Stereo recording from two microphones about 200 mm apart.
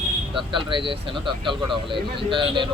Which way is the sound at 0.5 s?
25° right (ahead or behind).